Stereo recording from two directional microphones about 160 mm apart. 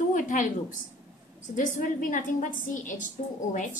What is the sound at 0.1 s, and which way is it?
A woman's voice, 55° left (ahead or behind).